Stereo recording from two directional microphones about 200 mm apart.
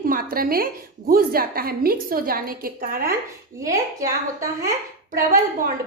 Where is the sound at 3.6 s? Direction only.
15° right (ahead or behind).